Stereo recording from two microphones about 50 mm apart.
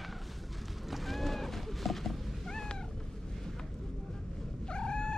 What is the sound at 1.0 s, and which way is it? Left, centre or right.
Cat, centre.